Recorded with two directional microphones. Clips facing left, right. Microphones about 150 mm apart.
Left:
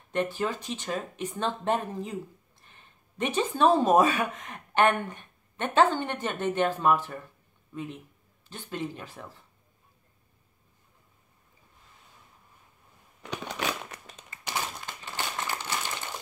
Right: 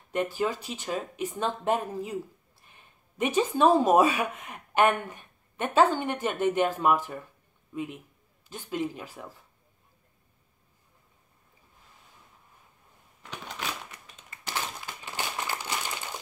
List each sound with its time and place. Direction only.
0.1 s a man's voice: 10° right (ahead or behind)
13.2 s a sound: 70° left (ahead or behind)
15.0 s crumpling: 15° right (ahead or behind)